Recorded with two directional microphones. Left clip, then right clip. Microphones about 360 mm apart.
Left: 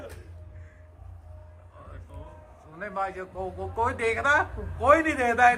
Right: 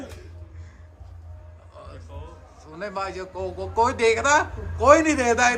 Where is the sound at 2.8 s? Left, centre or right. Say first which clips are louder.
Right 2 dB; centre.